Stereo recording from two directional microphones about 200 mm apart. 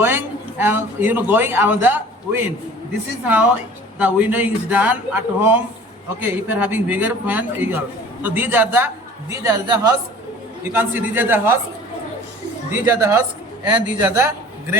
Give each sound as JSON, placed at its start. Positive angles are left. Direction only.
{"t": 0.6, "sound": "a man's voice", "side_deg": -10}
{"t": 12.7, "sound": "a man's voice", "side_deg": -10}